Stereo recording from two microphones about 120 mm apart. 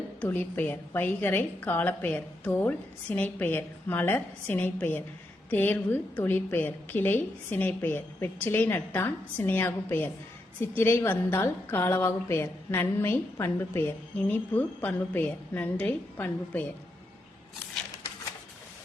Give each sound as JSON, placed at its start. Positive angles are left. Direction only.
{"t": 0.2, "sound": "a woman's voice", "side_deg": 15}